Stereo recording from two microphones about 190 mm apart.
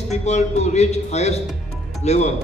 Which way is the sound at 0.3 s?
35° left (ahead or behind).